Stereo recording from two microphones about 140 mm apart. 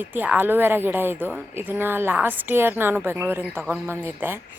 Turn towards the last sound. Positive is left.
turn(degrees=-15)  # may be behind; listen again after turning